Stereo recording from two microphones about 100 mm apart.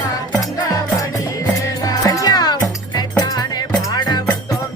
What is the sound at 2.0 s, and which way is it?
Music, 35° left (ahead or behind).